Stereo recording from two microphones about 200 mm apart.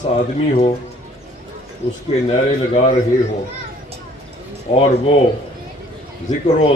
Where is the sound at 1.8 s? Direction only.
35° left (ahead or behind).